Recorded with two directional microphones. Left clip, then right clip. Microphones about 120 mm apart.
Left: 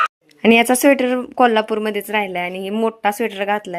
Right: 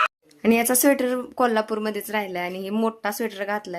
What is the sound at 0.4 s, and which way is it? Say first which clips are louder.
A woman's voice: left 7 dB; 45° left (ahead or behind).